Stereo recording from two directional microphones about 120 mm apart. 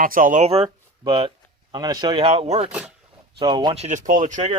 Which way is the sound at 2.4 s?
70° right (ahead or behind).